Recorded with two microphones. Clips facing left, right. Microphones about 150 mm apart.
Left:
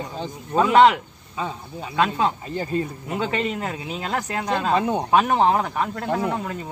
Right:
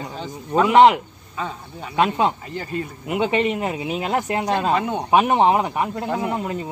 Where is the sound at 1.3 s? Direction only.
20° left (ahead or behind).